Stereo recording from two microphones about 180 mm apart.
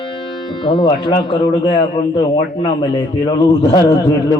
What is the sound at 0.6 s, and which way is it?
Speech, 25° left (ahead or behind).